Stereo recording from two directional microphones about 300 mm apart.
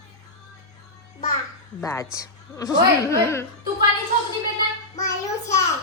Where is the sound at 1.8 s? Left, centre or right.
Centre.